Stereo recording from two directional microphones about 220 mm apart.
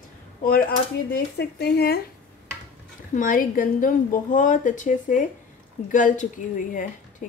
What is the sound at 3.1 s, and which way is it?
A woman's voice, 35° left (ahead or behind).